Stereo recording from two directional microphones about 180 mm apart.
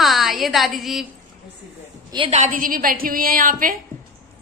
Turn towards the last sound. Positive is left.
turn(degrees=-50)  # may be behind; listen again after turning